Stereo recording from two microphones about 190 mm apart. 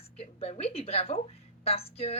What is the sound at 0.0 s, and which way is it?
A woman's voice, 30° left (ahead or behind).